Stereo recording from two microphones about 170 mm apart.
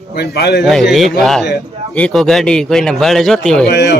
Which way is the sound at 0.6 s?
Centre (ahead or behind).